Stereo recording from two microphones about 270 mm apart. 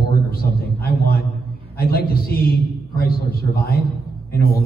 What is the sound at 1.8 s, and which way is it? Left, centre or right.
A man's voice, left.